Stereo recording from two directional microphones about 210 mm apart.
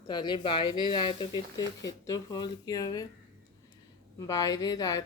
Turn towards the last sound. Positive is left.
turn(degrees=20)  # may be behind; listen again after turning